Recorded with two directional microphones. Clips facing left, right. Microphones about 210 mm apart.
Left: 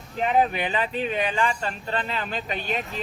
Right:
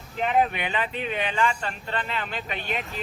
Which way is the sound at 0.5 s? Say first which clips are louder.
Left 3 dB; 35° left (ahead or behind).